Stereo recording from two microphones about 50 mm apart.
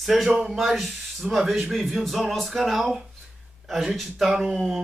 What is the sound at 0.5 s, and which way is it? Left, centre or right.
Speech, centre.